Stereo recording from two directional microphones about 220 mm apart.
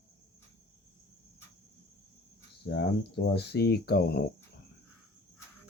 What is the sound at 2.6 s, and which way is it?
Speech, 50° left (ahead or behind).